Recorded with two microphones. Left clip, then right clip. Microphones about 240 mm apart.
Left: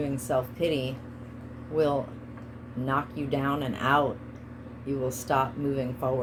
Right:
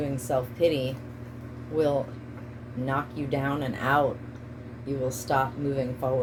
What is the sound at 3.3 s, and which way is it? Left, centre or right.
Speech, left.